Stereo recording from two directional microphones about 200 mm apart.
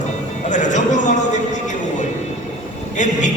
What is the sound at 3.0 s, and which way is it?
Speech, 40° left (ahead or behind).